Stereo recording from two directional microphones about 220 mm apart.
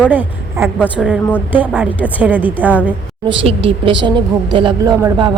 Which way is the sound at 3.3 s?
25° right (ahead or behind).